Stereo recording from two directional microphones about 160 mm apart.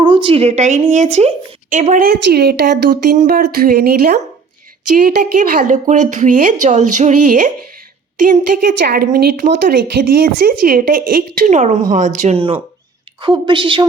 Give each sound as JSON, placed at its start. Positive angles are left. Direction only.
{"t": 0.0, "sound": "speech", "side_deg": -30}
{"t": 1.7, "sound": "speech", "side_deg": -55}
{"t": 4.9, "sound": "a woman's voice", "side_deg": -60}
{"t": 8.9, "sound": "a woman's voice", "side_deg": -70}
{"t": 13.2, "sound": "speech", "side_deg": -30}